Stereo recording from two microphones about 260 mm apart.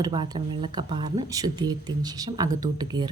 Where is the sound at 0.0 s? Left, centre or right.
Centre.